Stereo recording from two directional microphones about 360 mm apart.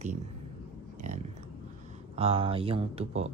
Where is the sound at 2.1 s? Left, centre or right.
Centre.